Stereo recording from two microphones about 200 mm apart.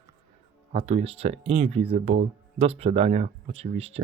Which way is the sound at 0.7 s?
30° right (ahead or behind).